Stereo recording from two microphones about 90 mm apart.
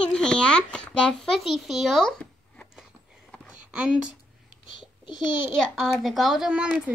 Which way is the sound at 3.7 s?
10° right (ahead or behind).